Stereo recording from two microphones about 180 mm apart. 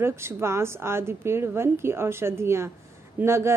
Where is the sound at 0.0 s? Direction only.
15° right (ahead or behind).